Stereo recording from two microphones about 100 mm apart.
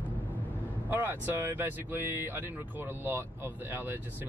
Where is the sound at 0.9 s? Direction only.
20° right (ahead or behind).